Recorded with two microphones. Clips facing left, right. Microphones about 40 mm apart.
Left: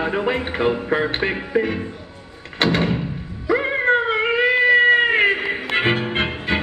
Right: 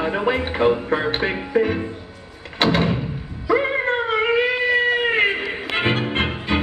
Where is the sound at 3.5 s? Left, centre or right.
Centre.